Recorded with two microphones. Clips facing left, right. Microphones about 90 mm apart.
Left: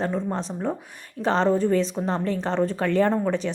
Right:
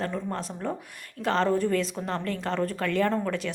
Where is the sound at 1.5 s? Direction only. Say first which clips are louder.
Left 4 dB; 20° left (ahead or behind).